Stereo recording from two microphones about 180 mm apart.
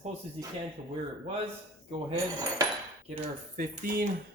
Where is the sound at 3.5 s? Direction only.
45° right (ahead or behind).